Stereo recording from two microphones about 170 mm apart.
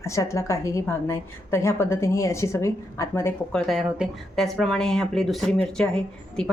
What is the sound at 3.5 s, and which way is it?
A woman's voice, centre (ahead or behind).